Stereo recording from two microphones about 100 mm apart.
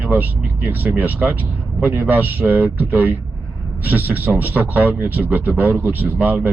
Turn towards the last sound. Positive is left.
turn(degrees=-15)  # may be behind; listen again after turning